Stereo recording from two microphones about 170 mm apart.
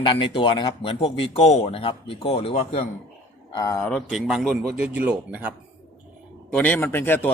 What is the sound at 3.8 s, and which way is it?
A man's voice, centre (ahead or behind).